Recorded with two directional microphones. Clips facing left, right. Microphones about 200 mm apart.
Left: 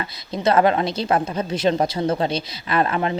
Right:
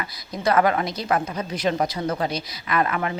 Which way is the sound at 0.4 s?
25° left (ahead or behind).